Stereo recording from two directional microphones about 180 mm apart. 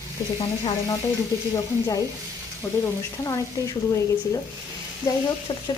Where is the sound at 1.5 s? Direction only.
20° left (ahead or behind).